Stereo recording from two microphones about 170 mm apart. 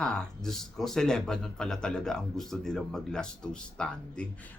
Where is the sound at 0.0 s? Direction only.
5° left (ahead or behind).